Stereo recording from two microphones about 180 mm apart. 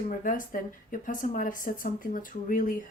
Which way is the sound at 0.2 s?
50° left (ahead or behind).